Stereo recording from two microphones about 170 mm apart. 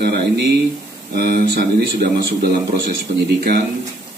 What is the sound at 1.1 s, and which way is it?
A man's voice, 65° right (ahead or behind).